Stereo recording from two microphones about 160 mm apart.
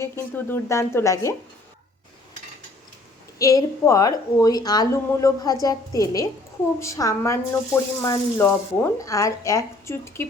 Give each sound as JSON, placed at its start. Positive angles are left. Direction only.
{"t": 0.0, "sound": "speech", "side_deg": 15}
{"t": 3.3, "sound": "a woman's voice", "side_deg": 20}